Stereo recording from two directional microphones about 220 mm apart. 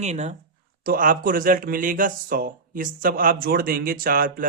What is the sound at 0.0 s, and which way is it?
Speech, 30° right (ahead or behind).